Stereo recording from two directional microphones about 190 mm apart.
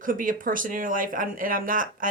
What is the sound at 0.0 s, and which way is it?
A woman's voice, 45° right (ahead or behind).